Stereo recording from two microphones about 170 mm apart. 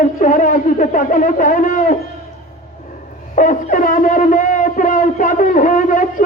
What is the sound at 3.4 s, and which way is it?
Speech, 50° left (ahead or behind).